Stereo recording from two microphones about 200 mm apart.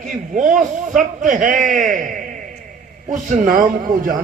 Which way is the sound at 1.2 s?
40° right (ahead or behind).